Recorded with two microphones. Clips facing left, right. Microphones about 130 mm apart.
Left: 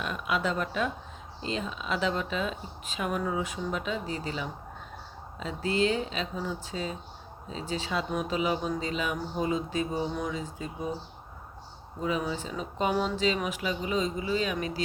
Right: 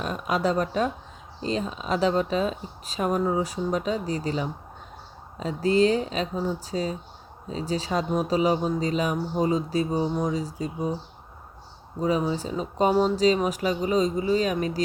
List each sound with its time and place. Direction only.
0.0 s speech: 40° right (ahead or behind)
12.0 s speech: 35° right (ahead or behind)